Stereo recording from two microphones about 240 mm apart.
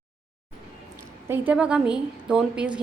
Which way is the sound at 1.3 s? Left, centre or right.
Centre.